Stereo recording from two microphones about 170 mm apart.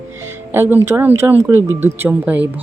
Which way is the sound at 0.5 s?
15° right (ahead or behind).